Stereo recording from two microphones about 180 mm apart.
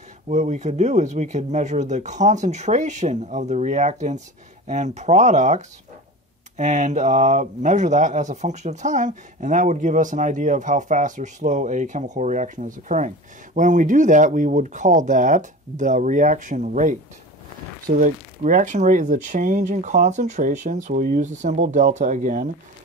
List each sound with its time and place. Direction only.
0.3 s speech: 40° right (ahead or behind)